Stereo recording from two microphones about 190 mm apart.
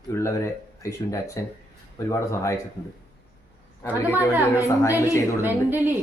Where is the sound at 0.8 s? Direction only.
15° left (ahead or behind).